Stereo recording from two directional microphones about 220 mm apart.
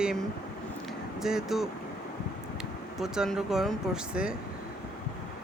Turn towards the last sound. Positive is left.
turn(degrees=-5)  # may be behind; listen again after turning